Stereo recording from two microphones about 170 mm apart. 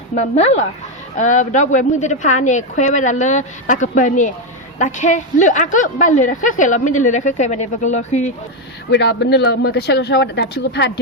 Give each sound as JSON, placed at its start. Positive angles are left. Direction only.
{"t": 0.2, "sound": "a woman's voice", "side_deg": 40}
{"t": 8.9, "sound": "speech", "side_deg": 90}